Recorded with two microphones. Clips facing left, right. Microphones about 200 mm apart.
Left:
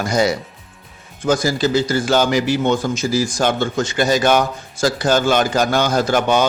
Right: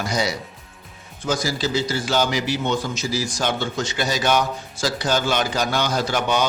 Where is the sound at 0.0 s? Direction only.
50° left (ahead or behind).